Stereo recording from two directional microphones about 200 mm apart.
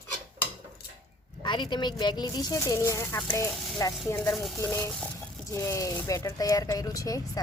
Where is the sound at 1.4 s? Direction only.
25° left (ahead or behind).